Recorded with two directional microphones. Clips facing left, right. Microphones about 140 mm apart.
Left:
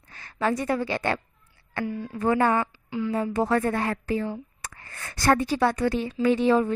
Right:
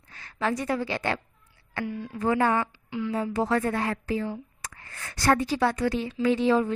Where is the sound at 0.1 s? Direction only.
45° left (ahead or behind).